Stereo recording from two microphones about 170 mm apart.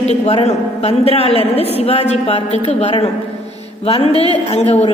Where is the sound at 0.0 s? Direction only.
40° left (ahead or behind).